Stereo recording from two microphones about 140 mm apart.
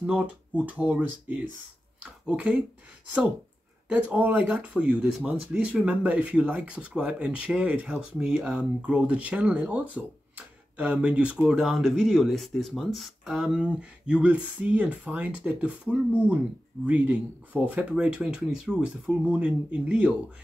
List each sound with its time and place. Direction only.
0.0 s speech: 10° right (ahead or behind)
3.9 s speech: 10° right (ahead or behind)